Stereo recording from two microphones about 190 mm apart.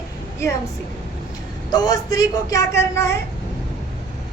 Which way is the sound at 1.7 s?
20° left (ahead or behind).